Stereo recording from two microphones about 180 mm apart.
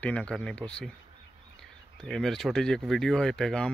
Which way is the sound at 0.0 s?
5° left (ahead or behind).